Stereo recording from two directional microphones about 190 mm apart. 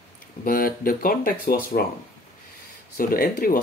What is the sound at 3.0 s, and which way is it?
Speech, 45° left (ahead or behind).